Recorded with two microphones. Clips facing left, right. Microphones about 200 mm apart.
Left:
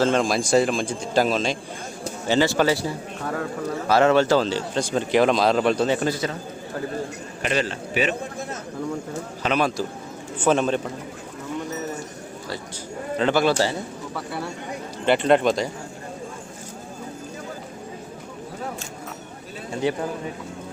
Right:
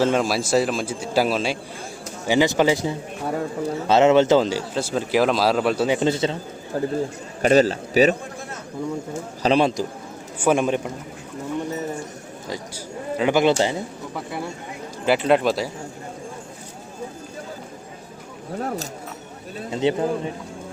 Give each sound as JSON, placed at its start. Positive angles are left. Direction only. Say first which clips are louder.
{"t": 0.0, "sound": "speech", "louder": "even", "side_deg": -5}
{"t": 6.0, "sound": "a man's voice", "louder": "right 4 dB", "side_deg": -25}
{"t": 9.4, "sound": "a man's voice", "louder": "right 4 dB", "side_deg": -30}
{"t": 10.3, "sound": "a man's voice", "louder": "right 1 dB", "side_deg": -10}
{"t": 13.1, "sound": "speech", "louder": "right 2 dB", "side_deg": -15}
{"t": 15.0, "sound": "speech", "louder": "even", "side_deg": -5}
{"t": 19.7, "sound": "a man's voice", "louder": "right 3 dB", "side_deg": -25}